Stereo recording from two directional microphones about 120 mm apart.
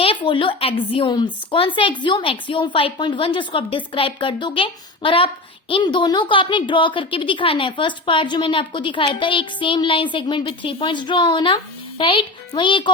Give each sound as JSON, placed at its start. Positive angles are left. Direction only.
{"t": 0.0, "sound": "a woman's voice", "side_deg": 45}